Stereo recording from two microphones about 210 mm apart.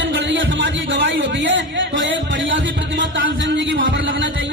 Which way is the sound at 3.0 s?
60° right (ahead or behind).